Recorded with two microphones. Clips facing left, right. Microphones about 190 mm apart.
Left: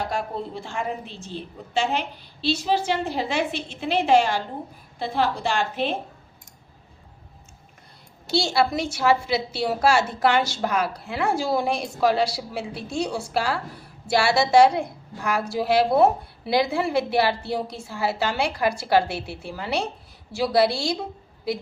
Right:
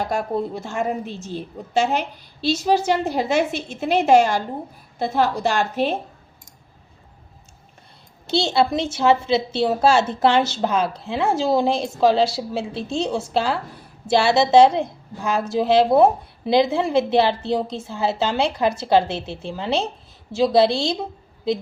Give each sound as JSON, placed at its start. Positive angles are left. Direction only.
{"t": 0.1, "sound": "a woman's voice", "side_deg": -45}
{"t": 8.3, "sound": "a woman's voice", "side_deg": -20}